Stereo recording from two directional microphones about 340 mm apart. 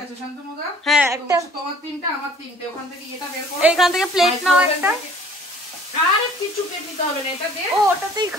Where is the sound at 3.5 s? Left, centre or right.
Centre.